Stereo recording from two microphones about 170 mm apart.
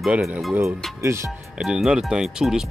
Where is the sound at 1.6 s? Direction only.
5° right (ahead or behind).